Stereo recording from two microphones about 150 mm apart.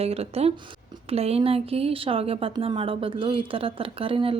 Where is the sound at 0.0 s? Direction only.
40° right (ahead or behind).